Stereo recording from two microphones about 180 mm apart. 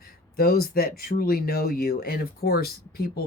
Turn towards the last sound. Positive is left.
turn(degrees=60)  # may be behind; listen again after turning